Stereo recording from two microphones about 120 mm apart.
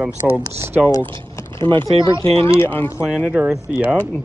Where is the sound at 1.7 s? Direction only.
40° right (ahead or behind).